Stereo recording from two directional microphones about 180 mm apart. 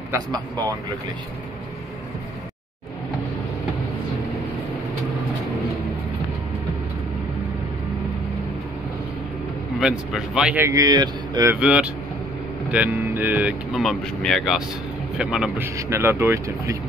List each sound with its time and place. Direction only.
0.1 s speech: 20° right (ahead or behind)
9.8 s speech: centre (ahead or behind); by 11.5 s 20° right (ahead or behind)
11.6 s speech: 5° right (ahead or behind)